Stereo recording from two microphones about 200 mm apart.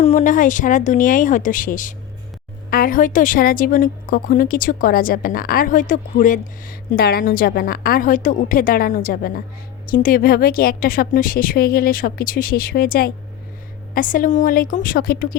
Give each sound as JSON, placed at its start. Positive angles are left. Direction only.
{"t": 0.0, "sound": "a woman's voice", "side_deg": 35}